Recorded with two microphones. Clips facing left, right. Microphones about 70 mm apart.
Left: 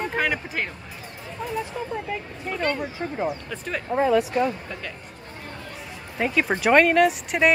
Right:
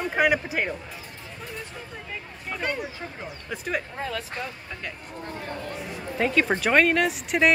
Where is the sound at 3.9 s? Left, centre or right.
Left.